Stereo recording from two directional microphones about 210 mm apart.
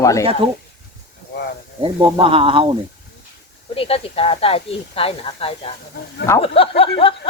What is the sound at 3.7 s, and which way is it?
Speech, 30° left (ahead or behind).